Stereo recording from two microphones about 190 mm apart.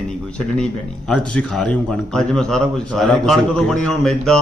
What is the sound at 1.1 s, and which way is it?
Speech, 5° left (ahead or behind).